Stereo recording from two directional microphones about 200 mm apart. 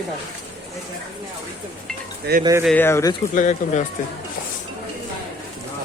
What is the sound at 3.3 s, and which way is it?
Speech, 40° left (ahead or behind).